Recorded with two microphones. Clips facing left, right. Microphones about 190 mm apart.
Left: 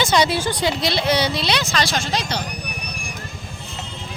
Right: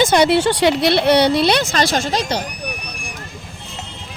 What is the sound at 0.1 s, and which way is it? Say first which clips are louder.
Speech: right 5 dB; 60° right (ahead or behind).